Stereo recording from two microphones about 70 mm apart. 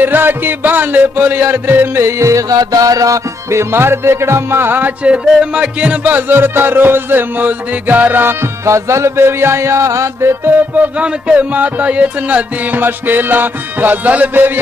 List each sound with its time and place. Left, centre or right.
0.0 s music: right
3.4 s music: right
5.0 s music: centre; by 10.9 s right
11.0 s music: centre